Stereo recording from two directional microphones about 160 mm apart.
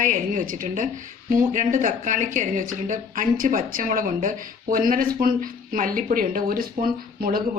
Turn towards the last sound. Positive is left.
turn(degrees=-65)  # may be behind; listen again after turning